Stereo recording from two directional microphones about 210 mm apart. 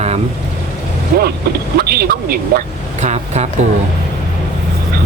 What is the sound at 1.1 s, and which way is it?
Speech, 45° right (ahead or behind).